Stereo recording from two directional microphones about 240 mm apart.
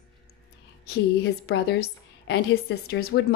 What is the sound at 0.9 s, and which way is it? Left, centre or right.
A woman's voice, left.